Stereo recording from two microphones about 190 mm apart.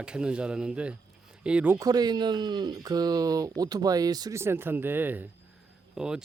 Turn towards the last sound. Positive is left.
turn(degrees=-5)  # may be behind; listen again after turning